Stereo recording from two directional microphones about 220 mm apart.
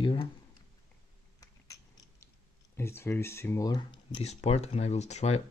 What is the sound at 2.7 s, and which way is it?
Speech, 10° left (ahead or behind).